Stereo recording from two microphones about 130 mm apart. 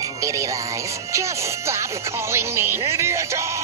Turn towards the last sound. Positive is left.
turn(degrees=-20)  # may be behind; listen again after turning